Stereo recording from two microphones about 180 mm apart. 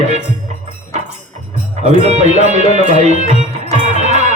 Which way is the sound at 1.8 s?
35° right (ahead or behind).